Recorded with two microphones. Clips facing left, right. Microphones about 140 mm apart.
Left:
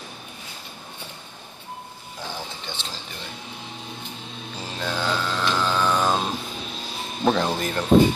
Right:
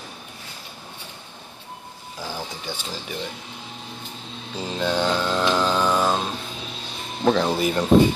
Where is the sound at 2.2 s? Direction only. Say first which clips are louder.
Right 3 dB; 10° right (ahead or behind).